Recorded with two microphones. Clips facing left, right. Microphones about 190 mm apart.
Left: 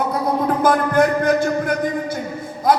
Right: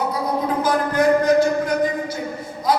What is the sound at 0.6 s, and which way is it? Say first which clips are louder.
A man's voice: left 2 dB; 50° left (ahead or behind).